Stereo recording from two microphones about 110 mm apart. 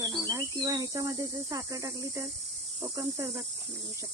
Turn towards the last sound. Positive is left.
turn(degrees=-25)  # may be behind; listen again after turning